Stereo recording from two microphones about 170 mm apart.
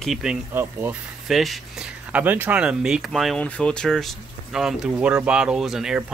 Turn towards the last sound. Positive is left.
turn(degrees=-5)  # may be behind; listen again after turning